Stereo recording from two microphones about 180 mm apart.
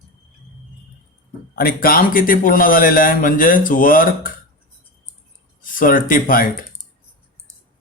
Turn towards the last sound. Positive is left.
turn(degrees=50)  # may be behind; listen again after turning